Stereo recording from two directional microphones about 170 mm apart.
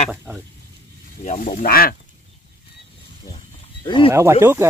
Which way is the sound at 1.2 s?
50° left (ahead or behind).